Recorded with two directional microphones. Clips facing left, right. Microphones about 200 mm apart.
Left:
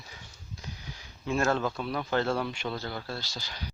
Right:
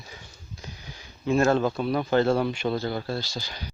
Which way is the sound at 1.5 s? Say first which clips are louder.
Right 6 dB; 25° right (ahead or behind).